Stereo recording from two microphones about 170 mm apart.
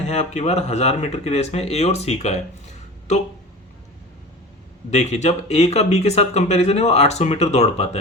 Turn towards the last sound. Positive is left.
turn(degrees=40)  # may be behind; listen again after turning